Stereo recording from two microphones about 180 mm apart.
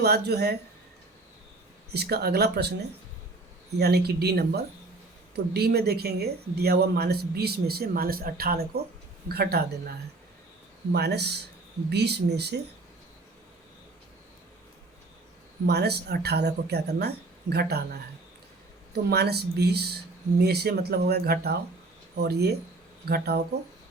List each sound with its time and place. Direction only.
0.0 s speech: 60° right (ahead or behind)
1.9 s speech: 65° right (ahead or behind)
3.8 s speech: 60° right (ahead or behind)
10.9 s speech: 65° right (ahead or behind)
15.6 s speech: 65° right (ahead or behind)
18.9 s speech: 65° right (ahead or behind)